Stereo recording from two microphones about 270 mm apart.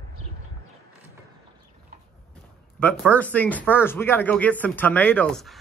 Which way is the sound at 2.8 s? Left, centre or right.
Centre.